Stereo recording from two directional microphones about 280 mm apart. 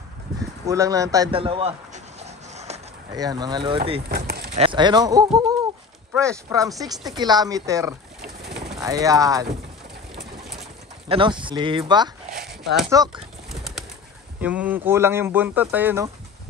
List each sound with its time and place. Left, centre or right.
0.7 s speech: centre
2.2 s a sound: right
4.1 s a sound: right
4.6 s speech: centre
10.1 s pigeon: centre
11.1 s speech: centre
13.5 s bird: centre
14.4 s speech: centre